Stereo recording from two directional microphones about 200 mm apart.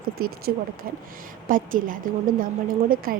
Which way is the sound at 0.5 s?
50° right (ahead or behind).